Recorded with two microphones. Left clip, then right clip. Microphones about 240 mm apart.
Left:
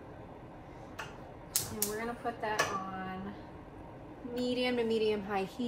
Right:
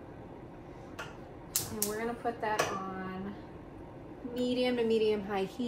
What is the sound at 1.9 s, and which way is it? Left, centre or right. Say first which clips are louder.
Speech: right 4 dB; centre.